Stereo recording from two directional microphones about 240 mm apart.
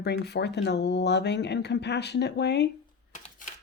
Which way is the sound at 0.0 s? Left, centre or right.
Left.